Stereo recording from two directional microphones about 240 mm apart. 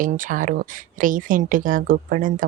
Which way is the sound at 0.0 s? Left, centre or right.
Right.